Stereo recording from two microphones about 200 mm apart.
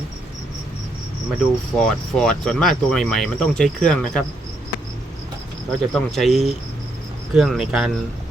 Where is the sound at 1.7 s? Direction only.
5° left (ahead or behind).